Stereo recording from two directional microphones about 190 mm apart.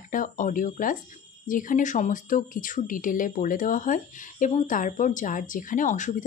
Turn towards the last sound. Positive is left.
turn(degrees=40)  # may be behind; listen again after turning